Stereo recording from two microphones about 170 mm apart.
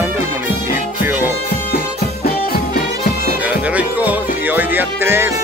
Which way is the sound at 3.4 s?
10° right (ahead or behind).